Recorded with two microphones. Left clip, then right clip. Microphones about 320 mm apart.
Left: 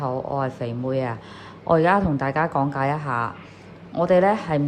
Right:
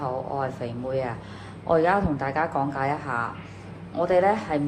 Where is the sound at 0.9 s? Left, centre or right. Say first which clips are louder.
Left 2 dB; left.